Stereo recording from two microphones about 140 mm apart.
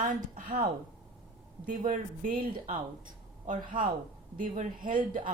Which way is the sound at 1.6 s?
70° right (ahead or behind).